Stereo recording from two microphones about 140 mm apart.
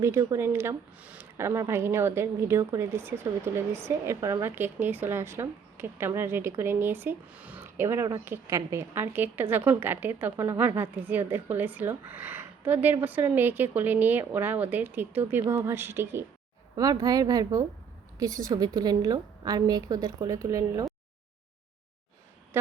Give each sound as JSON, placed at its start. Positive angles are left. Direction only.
{"t": 0.0, "sound": "a woman's voice", "side_deg": -20}